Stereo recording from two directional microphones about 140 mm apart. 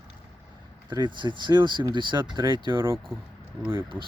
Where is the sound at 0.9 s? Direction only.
35° right (ahead or behind).